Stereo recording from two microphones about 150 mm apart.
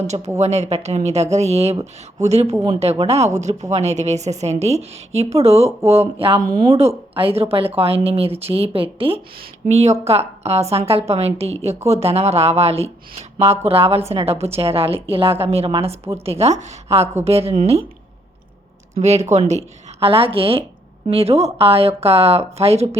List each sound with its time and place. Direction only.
0.3 s a woman's voice: 50° right (ahead or behind)
9.6 s a woman's voice: 50° right (ahead or behind)
18.9 s a woman's voice: 45° right (ahead or behind)